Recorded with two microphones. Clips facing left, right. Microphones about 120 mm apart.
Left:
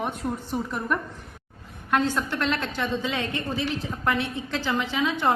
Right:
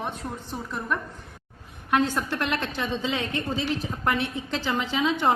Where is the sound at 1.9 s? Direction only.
15° right (ahead or behind).